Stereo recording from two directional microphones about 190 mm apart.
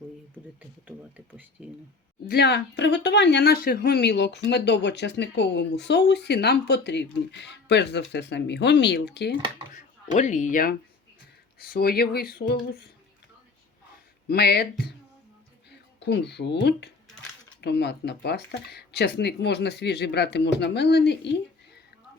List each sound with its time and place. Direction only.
0.9 s speech: 10° right (ahead or behind)
2.2 s speech: 60° left (ahead or behind)
9.7 s speech: 40° left (ahead or behind)
14.3 s speech: 55° left (ahead or behind)